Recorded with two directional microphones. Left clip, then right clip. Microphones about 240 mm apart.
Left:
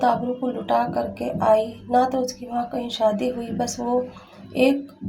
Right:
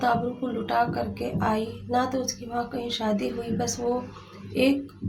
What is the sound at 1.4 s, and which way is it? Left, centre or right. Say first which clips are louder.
A woman's voice: left 10 dB; centre.